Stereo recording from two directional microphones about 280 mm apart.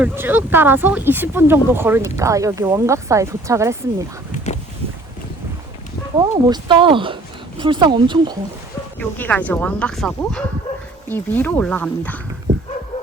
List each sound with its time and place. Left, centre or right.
0.0 s speech: centre
4.5 s boat: left
6.5 s speech: centre
9.0 s speech: centre